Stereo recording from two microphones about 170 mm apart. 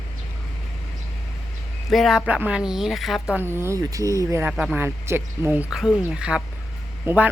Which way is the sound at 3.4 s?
15° right (ahead or behind).